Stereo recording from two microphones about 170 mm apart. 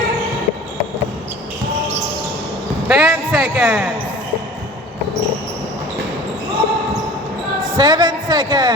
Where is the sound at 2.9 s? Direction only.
10° right (ahead or behind).